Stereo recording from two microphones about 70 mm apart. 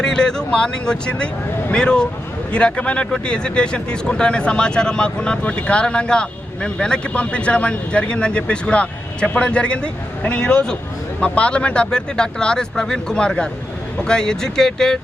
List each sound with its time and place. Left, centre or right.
0.0 s speech: centre